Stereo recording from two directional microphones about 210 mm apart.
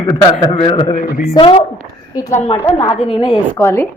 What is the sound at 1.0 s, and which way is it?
Speech, 40° left (ahead or behind).